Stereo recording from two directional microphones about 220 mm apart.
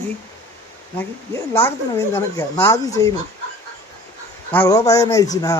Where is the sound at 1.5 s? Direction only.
10° left (ahead or behind).